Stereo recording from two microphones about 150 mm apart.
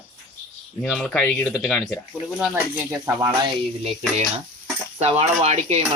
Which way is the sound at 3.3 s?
30° right (ahead or behind).